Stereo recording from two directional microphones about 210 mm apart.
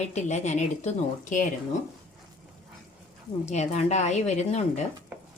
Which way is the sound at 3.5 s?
35° left (ahead or behind).